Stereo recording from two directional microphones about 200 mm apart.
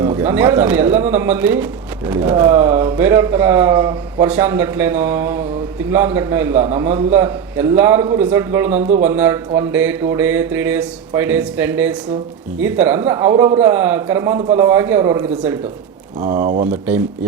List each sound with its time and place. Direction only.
0.0 s speech: 10° right (ahead or behind)
16.2 s speech: 40° right (ahead or behind)